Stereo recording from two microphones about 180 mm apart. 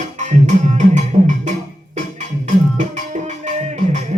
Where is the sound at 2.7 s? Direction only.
45° right (ahead or behind).